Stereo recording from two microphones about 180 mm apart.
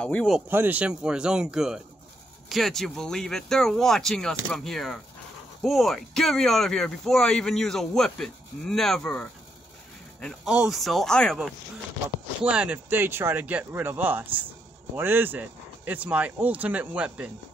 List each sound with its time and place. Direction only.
0.0 s speech: 5° left (ahead or behind)
0.5 s speech: 10° right (ahead or behind); by 9.3 s 5° left (ahead or behind)
10.2 s speech: 5° right (ahead or behind)